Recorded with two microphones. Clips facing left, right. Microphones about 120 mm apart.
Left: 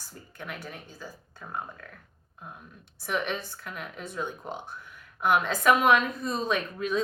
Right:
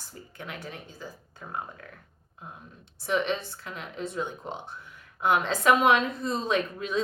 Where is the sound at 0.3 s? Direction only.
20° right (ahead or behind).